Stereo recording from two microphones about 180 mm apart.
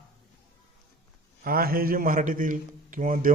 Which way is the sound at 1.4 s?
55° right (ahead or behind).